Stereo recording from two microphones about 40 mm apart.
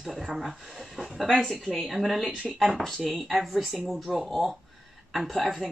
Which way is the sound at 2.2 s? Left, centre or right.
Centre.